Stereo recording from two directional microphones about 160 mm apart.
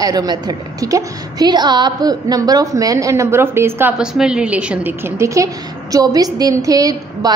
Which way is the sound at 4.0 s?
5° right (ahead or behind).